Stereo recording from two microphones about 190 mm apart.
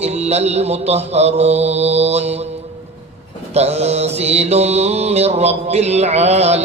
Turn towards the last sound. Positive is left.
turn(degrees=-35)  # may be behind; listen again after turning